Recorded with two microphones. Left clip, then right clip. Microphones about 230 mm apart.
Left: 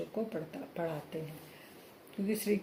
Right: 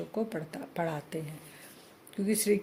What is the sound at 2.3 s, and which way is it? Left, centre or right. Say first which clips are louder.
Speech: right 5 dB; right.